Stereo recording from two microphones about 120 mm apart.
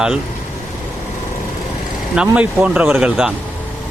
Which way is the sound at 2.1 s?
10° right (ahead or behind).